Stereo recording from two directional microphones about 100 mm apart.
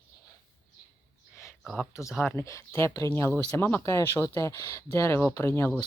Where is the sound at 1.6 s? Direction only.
5° left (ahead or behind).